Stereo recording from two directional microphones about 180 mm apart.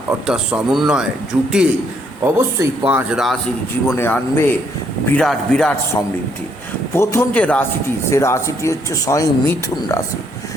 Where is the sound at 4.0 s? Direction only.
10° left (ahead or behind).